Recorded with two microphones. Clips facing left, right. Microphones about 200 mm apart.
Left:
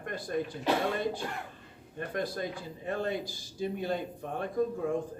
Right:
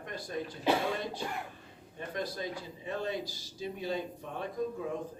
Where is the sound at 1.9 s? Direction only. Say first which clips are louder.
Left 3 dB; 55° left (ahead or behind).